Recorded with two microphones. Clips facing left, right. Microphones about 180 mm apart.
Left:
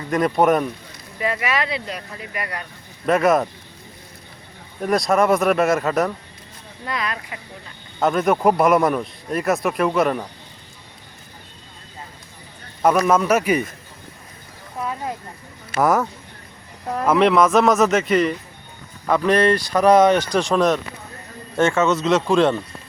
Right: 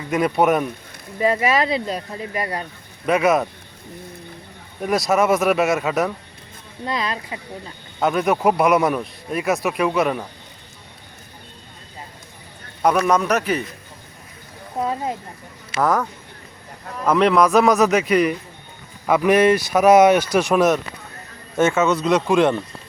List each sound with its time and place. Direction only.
0.1 s a man's voice: centre (ahead or behind)
1.2 s speech: 35° right (ahead or behind)
3.1 s a man's voice: centre (ahead or behind)
4.8 s a man's voice: centre (ahead or behind)
6.8 s speech: 30° right (ahead or behind)
8.0 s a man's voice: centre (ahead or behind)
13.1 s a man's voice: 5° left (ahead or behind)
14.8 s speech: 30° right (ahead or behind)
15.8 s a man's voice: 10° left (ahead or behind)
17.1 s a man's voice: centre (ahead or behind)
22.3 s speech: 15° right (ahead or behind)